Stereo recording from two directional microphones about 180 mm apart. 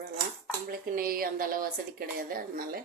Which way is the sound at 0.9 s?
55° right (ahead or behind).